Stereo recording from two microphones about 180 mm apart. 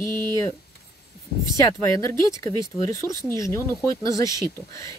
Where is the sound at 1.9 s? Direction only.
20° left (ahead or behind).